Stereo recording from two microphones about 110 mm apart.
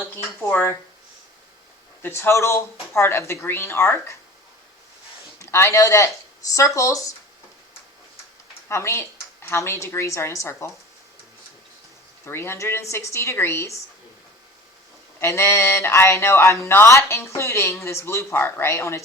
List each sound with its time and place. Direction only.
0.5 s speech: 25° left (ahead or behind)
2.0 s speech: 20° left (ahead or behind)
5.4 s speech: 25° left (ahead or behind)
8.7 s speech: 25° left (ahead or behind)
12.2 s speech: 20° left (ahead or behind)
15.2 s speech: 25° left (ahead or behind)